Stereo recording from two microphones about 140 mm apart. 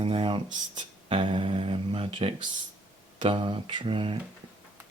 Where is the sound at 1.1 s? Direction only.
40° right (ahead or behind).